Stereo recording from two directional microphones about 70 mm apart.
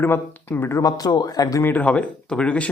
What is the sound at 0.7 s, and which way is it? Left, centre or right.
Speech, left.